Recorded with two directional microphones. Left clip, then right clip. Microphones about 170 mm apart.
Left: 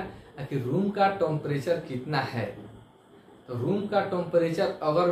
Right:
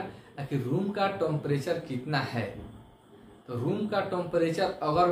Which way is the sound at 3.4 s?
20° right (ahead or behind).